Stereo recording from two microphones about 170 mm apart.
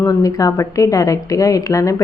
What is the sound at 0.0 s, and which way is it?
A woman's voice, 20° left (ahead or behind).